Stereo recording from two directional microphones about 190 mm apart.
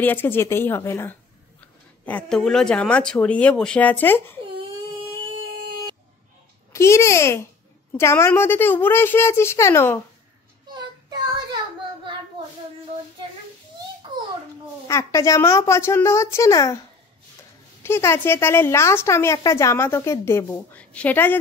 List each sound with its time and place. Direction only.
0.0 s a woman's voice: 10° left (ahead or behind)
6.7 s a child's voice: 15° left (ahead or behind)
10.7 s child singing: 20° right (ahead or behind)
14.9 s a woman's voice: 15° left (ahead or behind)
17.8 s a woman's voice: 15° left (ahead or behind)